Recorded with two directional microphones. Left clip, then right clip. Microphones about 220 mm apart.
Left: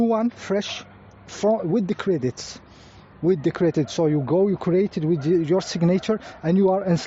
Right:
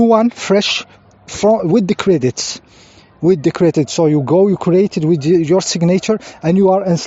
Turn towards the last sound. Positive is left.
turn(degrees=-30)  # may be behind; listen again after turning